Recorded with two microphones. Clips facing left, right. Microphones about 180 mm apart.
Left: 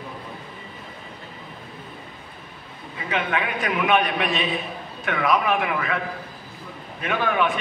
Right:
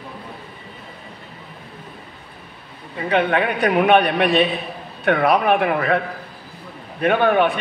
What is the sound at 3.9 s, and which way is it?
Speech, 65° right (ahead or behind).